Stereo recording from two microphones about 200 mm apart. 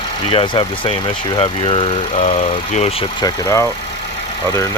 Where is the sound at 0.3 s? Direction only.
25° left (ahead or behind).